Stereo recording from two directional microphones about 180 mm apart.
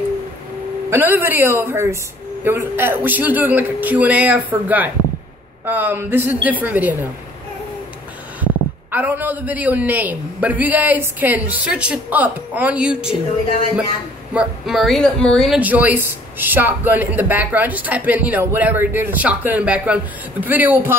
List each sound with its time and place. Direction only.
0.8 s speech: 15° right (ahead or behind)
8.9 s speech: 10° right (ahead or behind)
14.3 s speech: 5° right (ahead or behind)